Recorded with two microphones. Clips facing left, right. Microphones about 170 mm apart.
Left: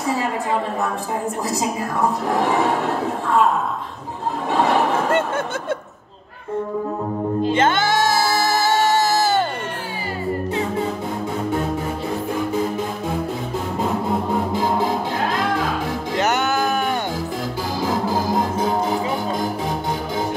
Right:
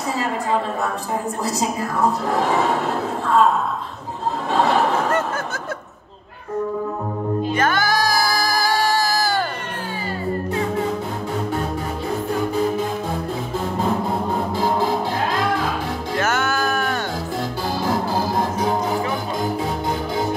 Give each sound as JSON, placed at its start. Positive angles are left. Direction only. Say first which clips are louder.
{"t": 7.5, "sound": "music", "louder": "left 2 dB", "side_deg": 25}
{"t": 16.2, "sound": "music", "louder": "left 2 dB", "side_deg": 20}